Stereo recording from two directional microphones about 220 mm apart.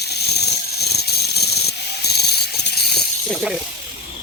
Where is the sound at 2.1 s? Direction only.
45° left (ahead or behind).